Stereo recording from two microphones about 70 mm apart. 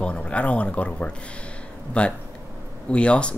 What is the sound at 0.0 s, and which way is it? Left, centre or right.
Speech, centre.